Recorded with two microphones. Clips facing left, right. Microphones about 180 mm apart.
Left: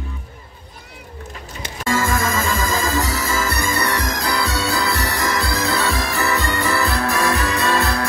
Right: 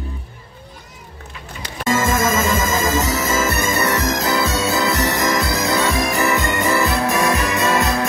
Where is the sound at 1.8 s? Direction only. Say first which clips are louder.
Right 3 dB; 20° right (ahead or behind).